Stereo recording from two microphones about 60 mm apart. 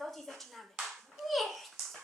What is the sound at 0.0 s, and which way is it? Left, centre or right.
Clapping, centre.